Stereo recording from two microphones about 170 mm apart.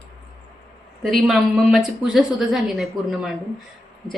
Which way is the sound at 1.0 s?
Centre (ahead or behind).